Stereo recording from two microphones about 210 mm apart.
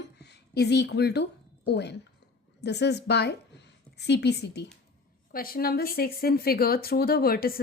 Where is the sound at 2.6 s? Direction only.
50° left (ahead or behind).